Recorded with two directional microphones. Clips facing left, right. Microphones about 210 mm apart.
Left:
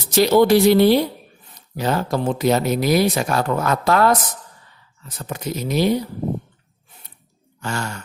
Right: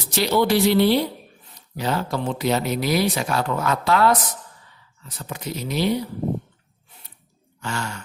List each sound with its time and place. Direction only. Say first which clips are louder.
0.1 s speech: left 6 dB; 45° left (ahead or behind)
5.1 s speech: left 4 dB; 45° left (ahead or behind)
7.6 s speech: left 3 dB; 45° left (ahead or behind)